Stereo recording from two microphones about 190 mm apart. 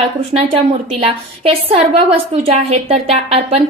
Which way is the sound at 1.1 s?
30° right (ahead or behind).